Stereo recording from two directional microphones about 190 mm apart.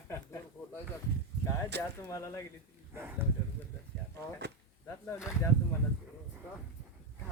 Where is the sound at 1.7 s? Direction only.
60° right (ahead or behind).